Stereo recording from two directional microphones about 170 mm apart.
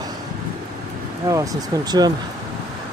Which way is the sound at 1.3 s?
20° right (ahead or behind).